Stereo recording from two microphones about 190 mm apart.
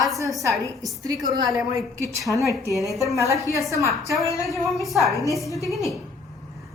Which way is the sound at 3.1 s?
15° right (ahead or behind).